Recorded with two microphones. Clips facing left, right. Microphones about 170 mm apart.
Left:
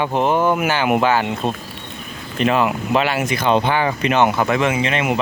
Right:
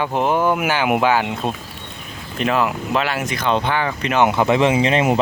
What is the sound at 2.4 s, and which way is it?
Speech, centre (ahead or behind).